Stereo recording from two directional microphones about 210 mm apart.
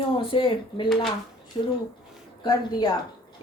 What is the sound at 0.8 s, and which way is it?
Speech, centre (ahead or behind).